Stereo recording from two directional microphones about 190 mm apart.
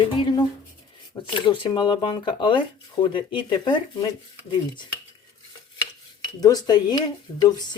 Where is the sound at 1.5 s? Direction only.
25° left (ahead or behind).